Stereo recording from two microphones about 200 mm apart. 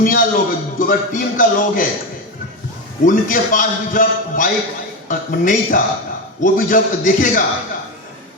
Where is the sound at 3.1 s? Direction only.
40° left (ahead or behind).